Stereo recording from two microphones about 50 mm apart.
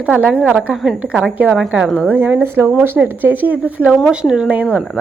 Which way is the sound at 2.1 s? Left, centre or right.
Right.